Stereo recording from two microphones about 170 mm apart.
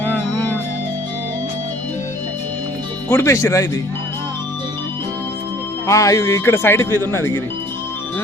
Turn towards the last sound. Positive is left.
turn(degrees=15)  # may be behind; listen again after turning